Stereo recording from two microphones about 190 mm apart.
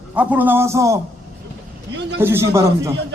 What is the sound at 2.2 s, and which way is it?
Speech, 15° right (ahead or behind).